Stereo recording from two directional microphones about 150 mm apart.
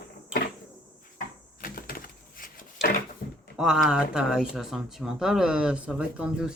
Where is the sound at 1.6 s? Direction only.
75° left (ahead or behind).